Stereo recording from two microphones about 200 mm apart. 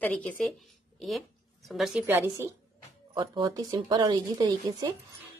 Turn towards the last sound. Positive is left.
turn(degrees=-20)  # may be behind; listen again after turning